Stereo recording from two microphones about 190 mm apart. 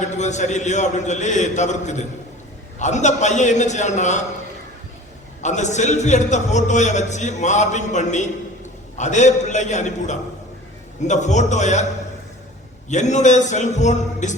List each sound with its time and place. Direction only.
0.0 s a man's voice: 40° left (ahead or behind)
5.4 s a man's voice: 40° left (ahead or behind)
12.9 s a man's voice: 40° left (ahead or behind)